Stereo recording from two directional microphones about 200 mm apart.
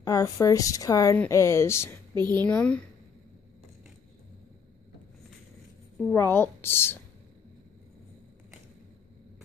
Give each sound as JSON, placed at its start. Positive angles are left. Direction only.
{"t": 0.0, "sound": "speech", "side_deg": 20}
{"t": 2.1, "sound": "speech", "side_deg": -20}
{"t": 2.4, "sound": "speech", "side_deg": 5}
{"t": 5.9, "sound": "speech", "side_deg": 10}